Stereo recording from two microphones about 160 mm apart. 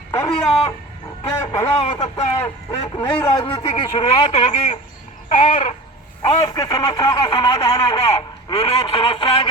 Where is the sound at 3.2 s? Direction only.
25° left (ahead or behind).